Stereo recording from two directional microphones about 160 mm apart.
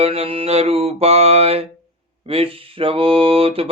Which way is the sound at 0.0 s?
35° right (ahead or behind).